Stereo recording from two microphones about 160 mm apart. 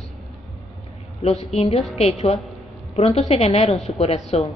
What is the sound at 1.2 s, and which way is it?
A woman's voice, 40° left (ahead or behind).